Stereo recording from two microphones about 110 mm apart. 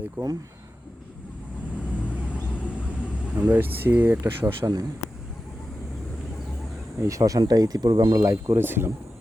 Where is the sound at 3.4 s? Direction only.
15° right (ahead or behind).